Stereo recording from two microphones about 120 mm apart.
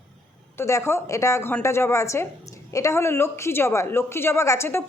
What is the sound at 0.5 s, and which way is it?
A woman's voice, 20° left (ahead or behind).